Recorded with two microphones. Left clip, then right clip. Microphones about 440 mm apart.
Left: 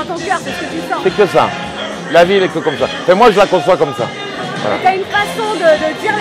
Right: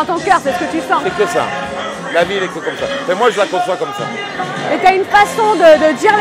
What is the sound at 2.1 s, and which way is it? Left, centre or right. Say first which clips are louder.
Speech: left 6 dB; left.